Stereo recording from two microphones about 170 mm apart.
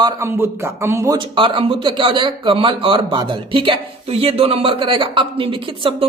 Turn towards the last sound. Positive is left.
turn(degrees=-30)  # may be behind; listen again after turning